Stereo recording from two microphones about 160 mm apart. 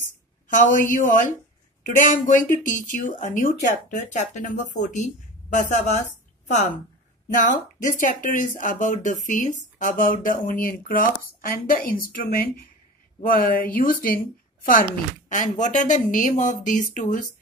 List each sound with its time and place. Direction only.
0.5 s speech: 55° left (ahead or behind)
15.2 s speech: 50° left (ahead or behind)